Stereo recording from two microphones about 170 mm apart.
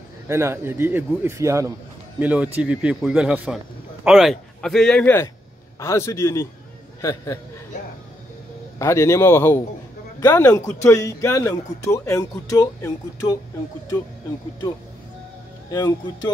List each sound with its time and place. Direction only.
0.3 s a man's voice: 15° right (ahead or behind); by 5.1 s 5° left (ahead or behind)
5.8 s speech: 15° left (ahead or behind)
8.7 s speech: 15° left (ahead or behind)